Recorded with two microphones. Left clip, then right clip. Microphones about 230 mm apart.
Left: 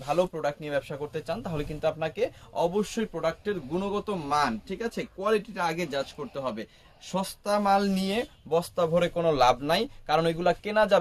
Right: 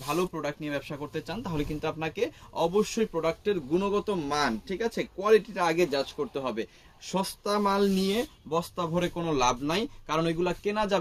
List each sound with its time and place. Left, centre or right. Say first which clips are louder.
0.2 s speech: left 4 dB; centre
5.5 s speech: right 3 dB; left